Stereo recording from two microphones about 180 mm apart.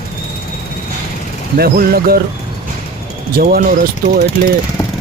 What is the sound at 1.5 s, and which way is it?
Speech, 60° right (ahead or behind).